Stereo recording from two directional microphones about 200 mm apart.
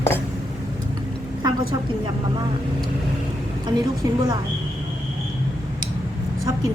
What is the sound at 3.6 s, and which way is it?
Speech, 20° right (ahead or behind).